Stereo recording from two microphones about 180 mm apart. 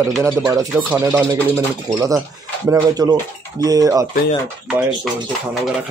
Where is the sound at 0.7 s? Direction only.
5° right (ahead or behind).